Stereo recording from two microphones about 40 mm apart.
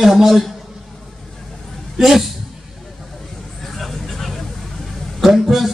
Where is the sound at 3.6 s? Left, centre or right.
Centre.